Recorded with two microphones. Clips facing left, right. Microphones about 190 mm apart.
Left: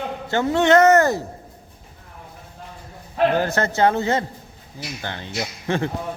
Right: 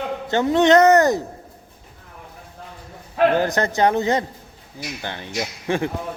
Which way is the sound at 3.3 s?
15° right (ahead or behind).